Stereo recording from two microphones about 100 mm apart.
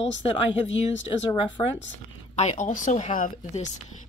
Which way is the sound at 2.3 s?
90° left.